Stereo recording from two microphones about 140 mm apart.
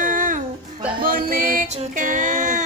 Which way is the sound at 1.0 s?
90° right.